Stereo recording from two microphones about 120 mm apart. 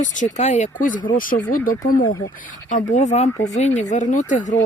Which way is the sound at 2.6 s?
90° left.